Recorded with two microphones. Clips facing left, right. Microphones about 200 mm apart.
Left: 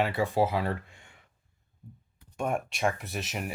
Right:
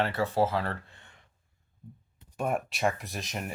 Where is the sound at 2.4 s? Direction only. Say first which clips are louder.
Even; centre (ahead or behind).